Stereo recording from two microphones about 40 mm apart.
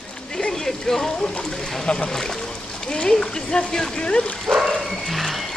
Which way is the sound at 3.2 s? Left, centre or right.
Left.